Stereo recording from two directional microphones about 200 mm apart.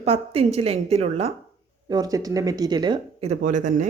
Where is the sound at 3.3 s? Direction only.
40° right (ahead or behind).